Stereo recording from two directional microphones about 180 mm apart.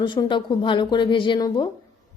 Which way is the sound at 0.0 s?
25° left (ahead or behind).